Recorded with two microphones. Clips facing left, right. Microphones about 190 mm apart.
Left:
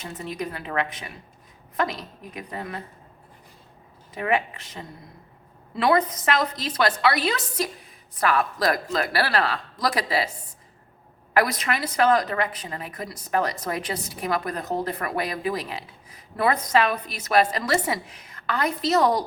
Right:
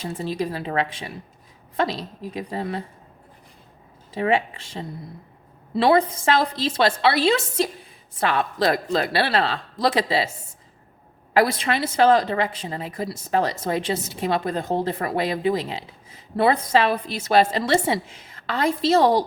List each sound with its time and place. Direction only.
0.0 s speech: 30° right (ahead or behind)
4.1 s speech: 30° right (ahead or behind)
11.3 s speech: 30° right (ahead or behind)